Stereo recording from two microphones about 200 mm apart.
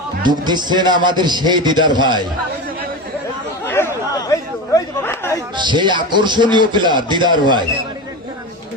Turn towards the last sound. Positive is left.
turn(degrees=-20)  # may be behind; listen again after turning